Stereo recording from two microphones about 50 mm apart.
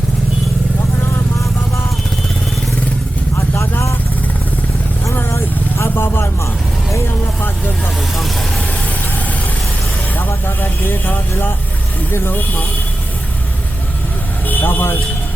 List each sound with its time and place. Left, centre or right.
3.3 s vehicle: left
5.7 s vehicle: left
10.2 s vehicle: left
12.1 s speech: left
14.4 s vehicle: left